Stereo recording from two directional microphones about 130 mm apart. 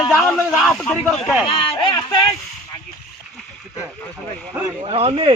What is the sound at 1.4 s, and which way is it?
Speech, 45° left (ahead or behind).